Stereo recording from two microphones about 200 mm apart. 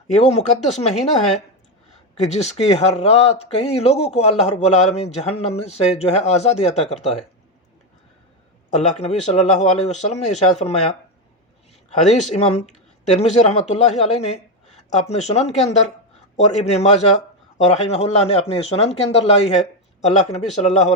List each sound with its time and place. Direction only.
0.1 s speech: 35° left (ahead or behind)
8.7 s speech: 35° left (ahead or behind)
13.1 s speech: 35° left (ahead or behind)